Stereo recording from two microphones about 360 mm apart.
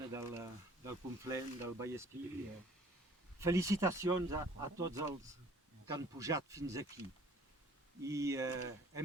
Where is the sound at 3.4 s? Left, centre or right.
Centre.